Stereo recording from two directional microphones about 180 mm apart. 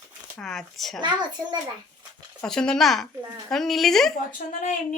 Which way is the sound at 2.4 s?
5° left (ahead or behind).